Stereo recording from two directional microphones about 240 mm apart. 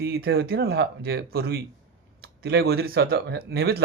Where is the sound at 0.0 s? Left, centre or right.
Right.